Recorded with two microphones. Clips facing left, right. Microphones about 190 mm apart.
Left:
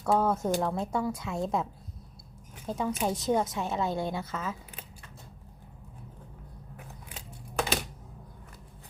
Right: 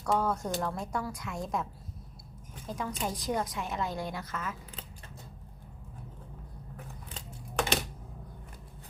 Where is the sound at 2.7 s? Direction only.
30° left (ahead or behind).